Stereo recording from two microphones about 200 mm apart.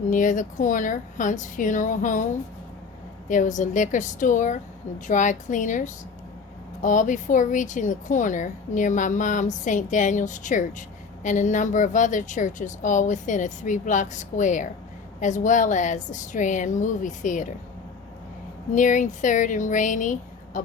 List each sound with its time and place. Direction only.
0.1 s speech: 40° left (ahead or behind)
3.2 s speech: 40° left (ahead or behind)
18.7 s speech: 40° left (ahead or behind)